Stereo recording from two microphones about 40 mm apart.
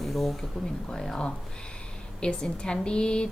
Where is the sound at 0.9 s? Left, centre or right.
Centre.